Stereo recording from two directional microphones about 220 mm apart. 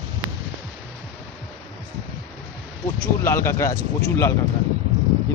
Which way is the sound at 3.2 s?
10° left (ahead or behind).